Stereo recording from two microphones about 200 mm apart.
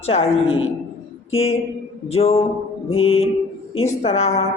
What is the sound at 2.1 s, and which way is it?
Speech, 30° left (ahead or behind).